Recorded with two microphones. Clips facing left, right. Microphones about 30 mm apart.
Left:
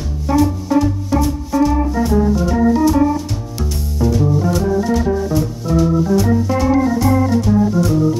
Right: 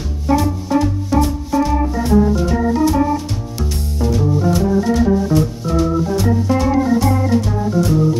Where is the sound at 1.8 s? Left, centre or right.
Centre.